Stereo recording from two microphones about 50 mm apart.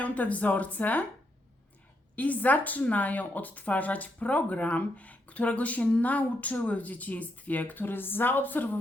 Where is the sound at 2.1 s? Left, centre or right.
Left.